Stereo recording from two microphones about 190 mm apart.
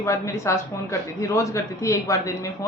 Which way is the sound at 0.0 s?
15° left (ahead or behind).